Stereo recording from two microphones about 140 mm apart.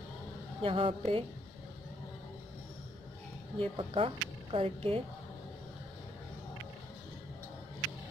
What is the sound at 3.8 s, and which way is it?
Speech, 40° right (ahead or behind).